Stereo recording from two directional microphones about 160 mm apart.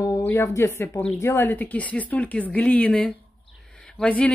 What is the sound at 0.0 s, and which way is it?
Speech, 15° left (ahead or behind).